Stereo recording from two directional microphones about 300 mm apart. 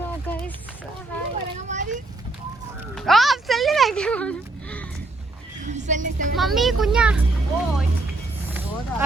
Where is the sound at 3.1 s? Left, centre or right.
Centre.